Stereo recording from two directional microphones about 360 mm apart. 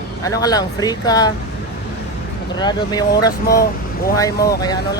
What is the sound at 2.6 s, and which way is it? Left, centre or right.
Speech, centre.